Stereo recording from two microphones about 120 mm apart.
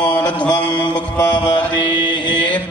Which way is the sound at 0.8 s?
40° left (ahead or behind).